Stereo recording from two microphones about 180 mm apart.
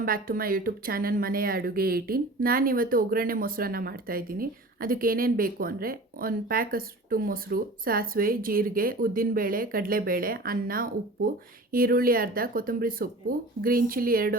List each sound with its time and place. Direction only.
0.0 s speech: 50° right (ahead or behind)